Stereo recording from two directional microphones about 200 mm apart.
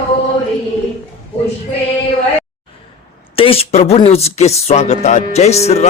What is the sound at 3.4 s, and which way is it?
Speech, 30° left (ahead or behind).